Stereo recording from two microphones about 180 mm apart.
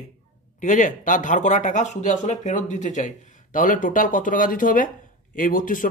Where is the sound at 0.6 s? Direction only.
45° left (ahead or behind).